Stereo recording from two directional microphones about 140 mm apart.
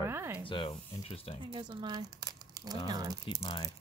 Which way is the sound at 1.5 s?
35° right (ahead or behind).